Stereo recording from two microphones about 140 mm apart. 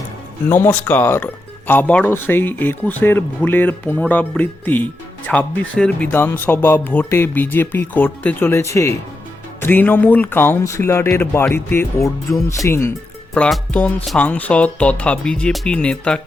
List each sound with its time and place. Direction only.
0.4 s speech: 15° left (ahead or behind)